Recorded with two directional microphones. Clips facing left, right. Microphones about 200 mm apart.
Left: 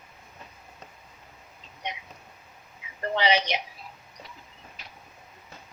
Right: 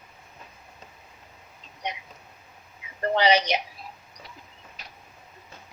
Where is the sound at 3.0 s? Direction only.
40° right (ahead or behind).